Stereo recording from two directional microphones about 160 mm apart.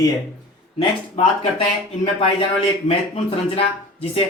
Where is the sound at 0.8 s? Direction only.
35° left (ahead or behind).